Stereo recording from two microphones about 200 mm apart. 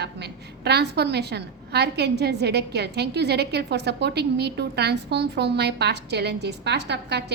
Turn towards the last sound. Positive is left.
turn(degrees=-55)  # may be behind; listen again after turning